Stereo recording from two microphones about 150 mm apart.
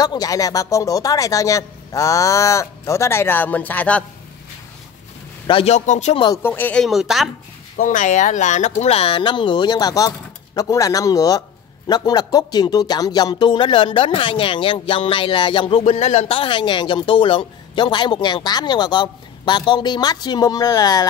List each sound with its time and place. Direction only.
0.0 s speech: 25° left (ahead or behind)
5.5 s a man's voice: 45° left (ahead or behind)
6.3 s speech: 15° left (ahead or behind); by 7.2 s centre (ahead or behind)
7.7 s speech: 60° left (ahead or behind); by 15.8 s 30° left (ahead or behind)
15.9 s speech: 45° left (ahead or behind); by 21.1 s 25° left (ahead or behind)